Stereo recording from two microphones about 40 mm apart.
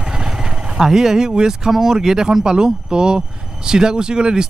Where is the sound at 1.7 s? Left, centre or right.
Centre.